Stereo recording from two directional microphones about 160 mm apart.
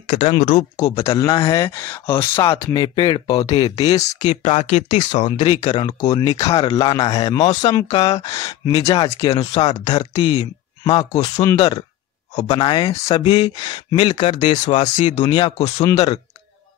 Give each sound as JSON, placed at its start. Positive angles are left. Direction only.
{"t": 0.1, "sound": "speech", "side_deg": 40}
{"t": 0.7, "sound": "speech", "side_deg": 20}
{"t": 5.4, "sound": "speech", "side_deg": 30}
{"t": 6.3, "sound": "speech", "side_deg": 40}
{"t": 6.7, "sound": "speech", "side_deg": 20}
{"t": 11.1, "sound": "speech", "side_deg": 40}
{"t": 11.4, "sound": "speech", "side_deg": 25}